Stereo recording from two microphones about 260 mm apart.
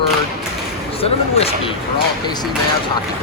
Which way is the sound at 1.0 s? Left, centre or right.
Left.